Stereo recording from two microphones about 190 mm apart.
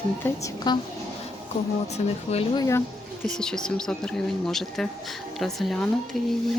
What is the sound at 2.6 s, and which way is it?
Speech, 15° left (ahead or behind).